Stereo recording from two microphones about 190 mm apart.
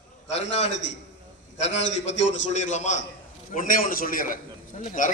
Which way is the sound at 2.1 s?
75° left (ahead or behind).